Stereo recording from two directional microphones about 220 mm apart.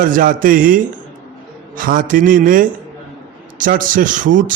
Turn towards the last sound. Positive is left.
turn(degrees=-35)  # may be behind; listen again after turning